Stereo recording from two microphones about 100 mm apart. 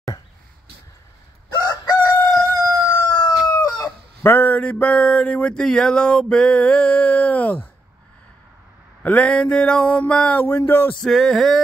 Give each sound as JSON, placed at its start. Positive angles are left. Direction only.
{"t": 1.5, "sound": "chicken", "side_deg": 45}
{"t": 2.8, "sound": "crowing", "side_deg": 30}
{"t": 3.6, "sound": "chicken", "side_deg": 40}
{"t": 4.2, "sound": "a sound", "side_deg": 20}
{"t": 9.0, "sound": "a sound", "side_deg": 15}
{"t": 10.4, "sound": "speech", "side_deg": 25}
{"t": 11.0, "sound": "male singing", "side_deg": 0}